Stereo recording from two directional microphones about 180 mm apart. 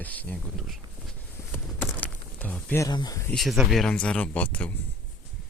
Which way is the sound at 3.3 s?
Centre (ahead or behind).